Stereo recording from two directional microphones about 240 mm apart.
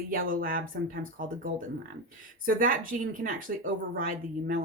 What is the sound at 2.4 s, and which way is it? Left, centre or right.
Speech, right.